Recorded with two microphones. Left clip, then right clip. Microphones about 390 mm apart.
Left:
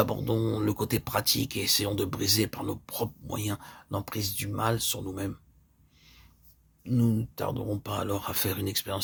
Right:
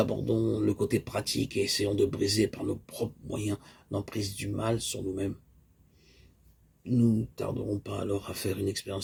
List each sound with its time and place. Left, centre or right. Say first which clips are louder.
0.0 s speech: even; left
6.8 s speech: right 1 dB; left